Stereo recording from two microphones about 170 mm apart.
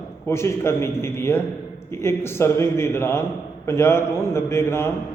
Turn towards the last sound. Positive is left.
turn(degrees=15)  # may be behind; listen again after turning